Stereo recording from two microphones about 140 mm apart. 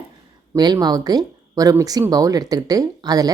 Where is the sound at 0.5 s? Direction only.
30° right (ahead or behind).